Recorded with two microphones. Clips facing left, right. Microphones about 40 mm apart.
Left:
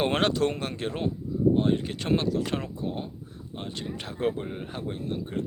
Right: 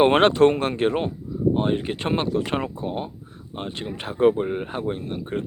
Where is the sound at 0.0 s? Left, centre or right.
Right.